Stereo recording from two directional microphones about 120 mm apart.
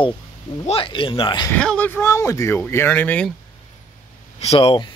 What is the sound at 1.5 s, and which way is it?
Speech, 10° left (ahead or behind).